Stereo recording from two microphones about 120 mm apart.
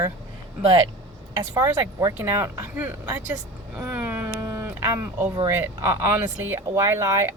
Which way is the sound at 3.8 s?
20° right (ahead or behind).